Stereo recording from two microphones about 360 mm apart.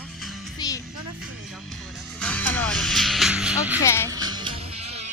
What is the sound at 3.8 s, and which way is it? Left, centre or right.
Speech, centre.